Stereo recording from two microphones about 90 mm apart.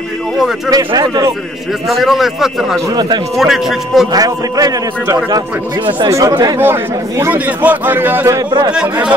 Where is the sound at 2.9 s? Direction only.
55° right (ahead or behind).